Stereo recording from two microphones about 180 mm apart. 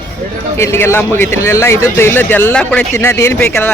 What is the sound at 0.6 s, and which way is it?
A man's voice, 15° left (ahead or behind).